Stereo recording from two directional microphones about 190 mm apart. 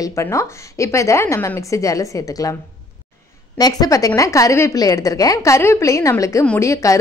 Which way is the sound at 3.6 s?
20° left (ahead or behind).